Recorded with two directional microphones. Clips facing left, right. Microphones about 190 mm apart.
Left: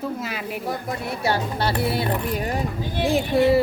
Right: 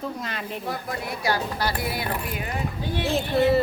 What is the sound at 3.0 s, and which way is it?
Speech, 15° left (ahead or behind).